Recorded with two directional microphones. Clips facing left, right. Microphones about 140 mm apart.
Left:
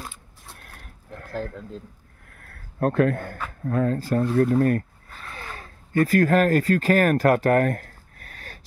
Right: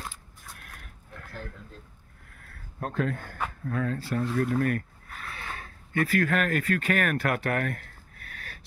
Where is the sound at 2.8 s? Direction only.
60° left (ahead or behind).